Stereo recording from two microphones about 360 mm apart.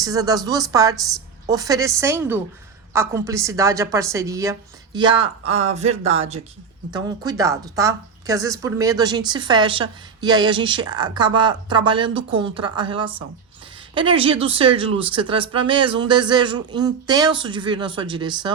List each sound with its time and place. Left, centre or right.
0.0 s speech: centre